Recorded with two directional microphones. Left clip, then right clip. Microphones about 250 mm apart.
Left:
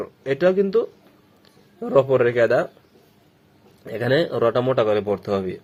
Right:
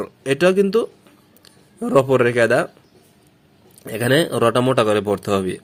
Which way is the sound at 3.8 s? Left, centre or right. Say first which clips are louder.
Right 3 dB; right.